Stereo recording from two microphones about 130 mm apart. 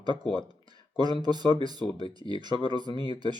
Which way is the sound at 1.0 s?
35° right (ahead or behind).